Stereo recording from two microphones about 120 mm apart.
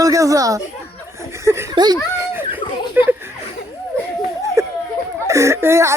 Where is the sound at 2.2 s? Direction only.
20° right (ahead or behind).